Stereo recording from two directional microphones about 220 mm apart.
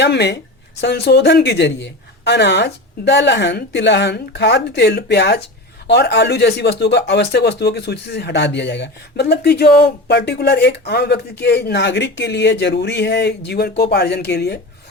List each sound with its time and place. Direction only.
0.0 s speech: 50° left (ahead or behind)